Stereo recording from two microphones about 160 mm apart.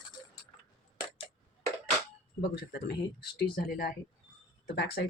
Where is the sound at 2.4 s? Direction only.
85° left.